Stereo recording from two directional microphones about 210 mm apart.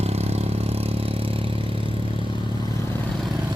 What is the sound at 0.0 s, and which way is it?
Vehicle, 30° right (ahead or behind).